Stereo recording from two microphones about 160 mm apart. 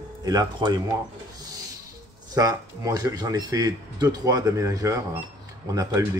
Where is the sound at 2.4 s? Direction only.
25° right (ahead or behind).